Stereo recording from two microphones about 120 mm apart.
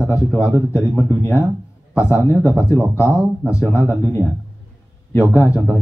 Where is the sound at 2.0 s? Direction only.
25° left (ahead or behind).